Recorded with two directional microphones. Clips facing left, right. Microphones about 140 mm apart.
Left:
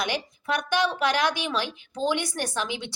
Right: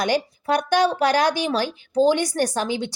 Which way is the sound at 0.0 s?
40° right (ahead or behind).